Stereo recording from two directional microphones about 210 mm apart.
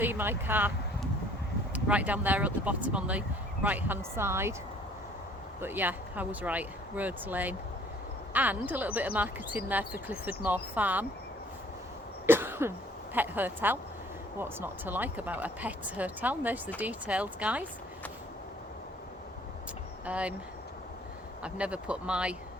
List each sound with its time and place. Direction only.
0.0 s speech: 10° right (ahead or behind)
1.7 s speech: 5° right (ahead or behind)
5.5 s speech: 10° right (ahead or behind)
12.2 s cough: 10° right (ahead or behind)
13.1 s speech: 10° right (ahead or behind)
20.1 s speech: 5° right (ahead or behind)
21.4 s speech: 5° right (ahead or behind)